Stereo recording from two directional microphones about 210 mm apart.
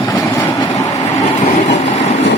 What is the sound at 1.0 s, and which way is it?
Vehicle, 30° left (ahead or behind).